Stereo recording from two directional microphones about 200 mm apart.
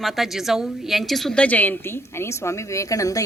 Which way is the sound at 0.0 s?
Centre (ahead or behind).